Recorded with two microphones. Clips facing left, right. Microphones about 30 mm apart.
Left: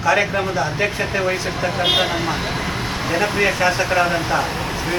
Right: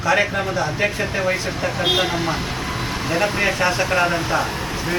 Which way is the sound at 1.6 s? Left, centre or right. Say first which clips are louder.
Left 3 dB; centre.